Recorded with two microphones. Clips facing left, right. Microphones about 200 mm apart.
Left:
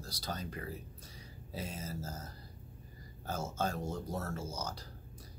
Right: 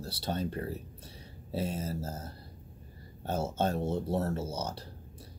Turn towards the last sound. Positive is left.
turn(degrees=-30)  # may be behind; listen again after turning